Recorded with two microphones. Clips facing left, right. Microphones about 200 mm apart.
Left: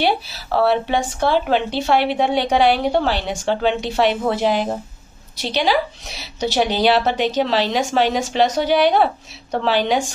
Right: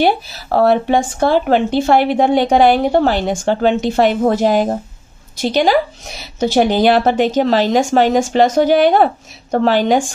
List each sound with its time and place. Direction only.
0.0 s speech: 45° right (ahead or behind)